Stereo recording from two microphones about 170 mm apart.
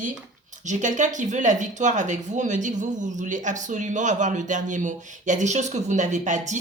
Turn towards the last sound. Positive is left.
turn(degrees=-45)  # may be behind; listen again after turning